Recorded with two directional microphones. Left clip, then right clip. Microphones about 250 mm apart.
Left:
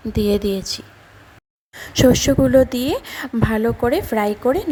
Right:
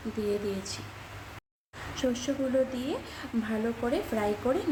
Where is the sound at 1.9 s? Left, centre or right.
Left.